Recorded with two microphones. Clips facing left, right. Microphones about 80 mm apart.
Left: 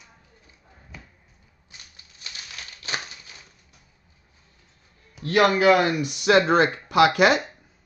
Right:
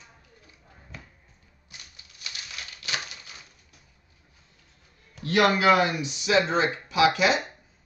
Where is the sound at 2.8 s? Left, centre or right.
Left.